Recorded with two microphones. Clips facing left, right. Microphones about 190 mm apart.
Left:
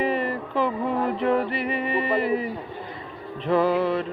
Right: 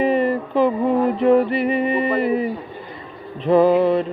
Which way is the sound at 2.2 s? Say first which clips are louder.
Right 5 dB; 25° right (ahead or behind).